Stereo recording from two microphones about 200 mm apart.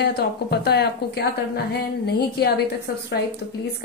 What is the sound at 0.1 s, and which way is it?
Speech, 50° left (ahead or behind).